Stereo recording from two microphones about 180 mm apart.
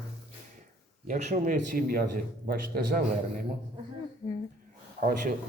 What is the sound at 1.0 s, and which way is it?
A man's voice, 45° right (ahead or behind).